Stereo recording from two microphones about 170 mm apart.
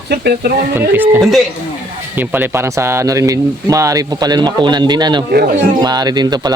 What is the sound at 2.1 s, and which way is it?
Speech, 10° right (ahead or behind).